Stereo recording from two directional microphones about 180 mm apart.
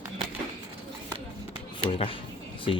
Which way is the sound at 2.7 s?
30° left (ahead or behind).